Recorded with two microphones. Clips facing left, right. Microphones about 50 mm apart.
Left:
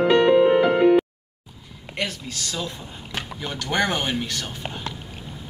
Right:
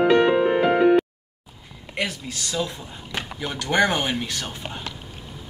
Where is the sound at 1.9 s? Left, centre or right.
Centre.